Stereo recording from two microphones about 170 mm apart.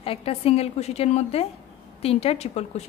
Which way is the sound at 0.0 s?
35° left (ahead or behind).